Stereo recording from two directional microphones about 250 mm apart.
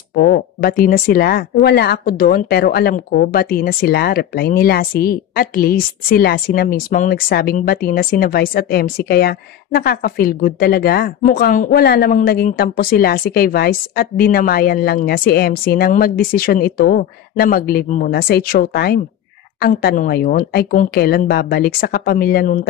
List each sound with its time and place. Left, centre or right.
0.1 s speech: left